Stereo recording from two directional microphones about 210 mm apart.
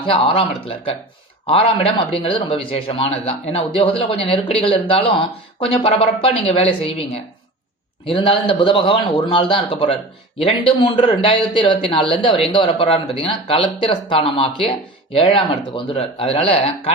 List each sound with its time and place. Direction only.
0.0 s a man's voice: 25° left (ahead or behind)
8.0 s a man's voice: 25° left (ahead or behind)